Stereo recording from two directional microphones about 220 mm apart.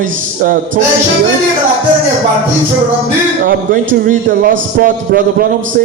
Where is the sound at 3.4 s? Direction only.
35° right (ahead or behind).